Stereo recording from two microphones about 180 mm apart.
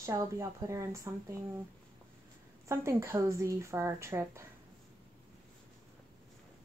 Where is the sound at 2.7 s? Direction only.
15° right (ahead or behind).